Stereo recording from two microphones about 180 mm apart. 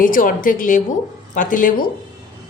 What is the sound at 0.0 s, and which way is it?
A woman's voice, 50° left (ahead or behind).